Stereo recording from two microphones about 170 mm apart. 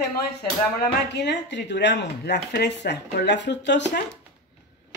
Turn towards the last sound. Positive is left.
turn(degrees=90)